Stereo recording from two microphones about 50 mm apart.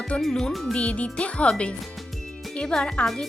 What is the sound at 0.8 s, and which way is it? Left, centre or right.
Speech, left.